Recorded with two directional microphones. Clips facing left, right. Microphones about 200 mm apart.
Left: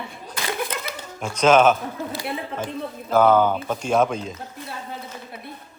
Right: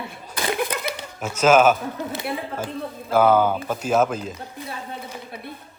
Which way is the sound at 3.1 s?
10° right (ahead or behind).